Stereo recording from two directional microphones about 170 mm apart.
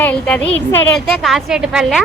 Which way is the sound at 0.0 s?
5° left (ahead or behind).